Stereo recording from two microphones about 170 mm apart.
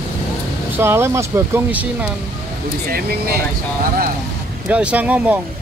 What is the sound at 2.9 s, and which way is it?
Speech, 65° right (ahead or behind).